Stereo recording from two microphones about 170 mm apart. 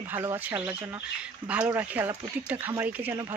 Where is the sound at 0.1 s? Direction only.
15° right (ahead or behind).